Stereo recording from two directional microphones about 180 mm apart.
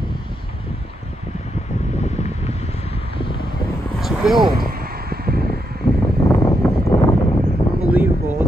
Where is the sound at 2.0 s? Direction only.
40° left (ahead or behind).